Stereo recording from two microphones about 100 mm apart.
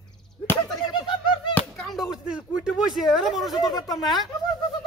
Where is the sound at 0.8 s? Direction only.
55° left (ahead or behind).